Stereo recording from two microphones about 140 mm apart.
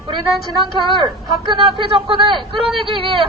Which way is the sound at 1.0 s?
35° right (ahead or behind).